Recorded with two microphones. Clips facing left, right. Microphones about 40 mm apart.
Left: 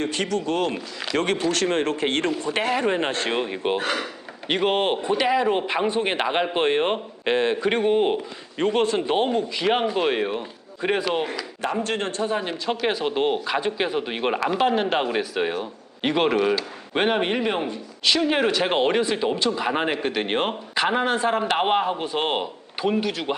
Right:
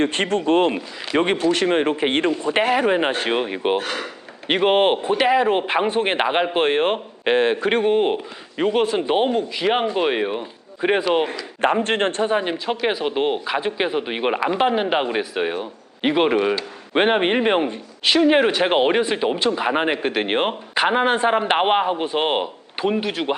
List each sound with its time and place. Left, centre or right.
0.0 s speech: right
11.6 s speech: right
12.3 s speech: right
17.0 s speech: right
18.0 s speech: right